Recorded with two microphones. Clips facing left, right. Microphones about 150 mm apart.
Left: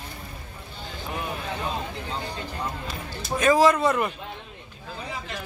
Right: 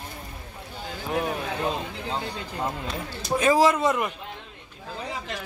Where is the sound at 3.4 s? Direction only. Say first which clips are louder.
Left 1 dB; 25° right (ahead or behind).